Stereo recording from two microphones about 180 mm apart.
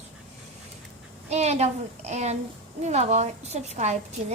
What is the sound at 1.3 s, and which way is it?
A child's voice, 40° right (ahead or behind).